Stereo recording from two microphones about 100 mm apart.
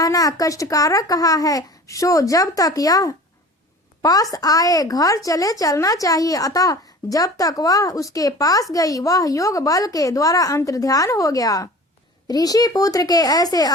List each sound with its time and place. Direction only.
0.0 s a woman's voice: 35° left (ahead or behind)